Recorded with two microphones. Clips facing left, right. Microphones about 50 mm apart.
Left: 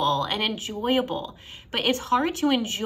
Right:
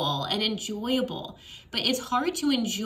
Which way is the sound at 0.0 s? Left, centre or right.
Left.